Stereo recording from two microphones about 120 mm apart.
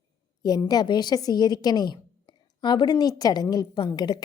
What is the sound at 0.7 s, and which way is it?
A woman's voice, 35° left (ahead or behind).